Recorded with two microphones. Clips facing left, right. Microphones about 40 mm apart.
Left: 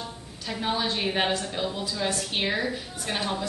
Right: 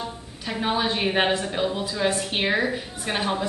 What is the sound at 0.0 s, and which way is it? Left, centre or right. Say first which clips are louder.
A woman's voice: right 4 dB; centre.